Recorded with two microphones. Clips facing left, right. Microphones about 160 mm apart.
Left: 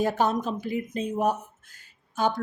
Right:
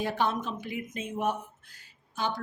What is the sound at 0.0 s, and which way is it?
Speech, 45° left (ahead or behind).